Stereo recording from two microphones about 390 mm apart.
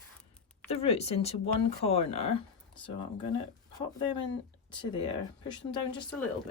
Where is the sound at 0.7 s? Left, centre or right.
Centre.